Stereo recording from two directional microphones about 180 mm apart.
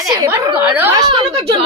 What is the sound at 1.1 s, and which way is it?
Speech, 30° right (ahead or behind).